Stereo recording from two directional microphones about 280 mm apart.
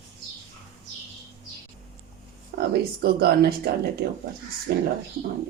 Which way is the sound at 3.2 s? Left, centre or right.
Right.